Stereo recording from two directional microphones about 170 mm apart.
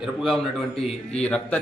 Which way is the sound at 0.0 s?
Centre (ahead or behind).